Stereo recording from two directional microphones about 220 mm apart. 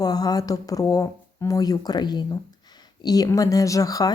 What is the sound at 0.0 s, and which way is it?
Speech, 15° left (ahead or behind).